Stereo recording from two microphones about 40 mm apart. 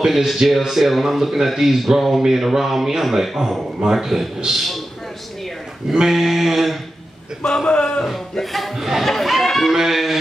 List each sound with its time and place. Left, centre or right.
0.0 s mantra: centre
0.5 s speech: centre
3.8 s mantra: centre
4.6 s speech: centre
5.9 s mantra: centre
7.4 s a man's voice: left
8.0 s speech: centre
9.7 s mantra: centre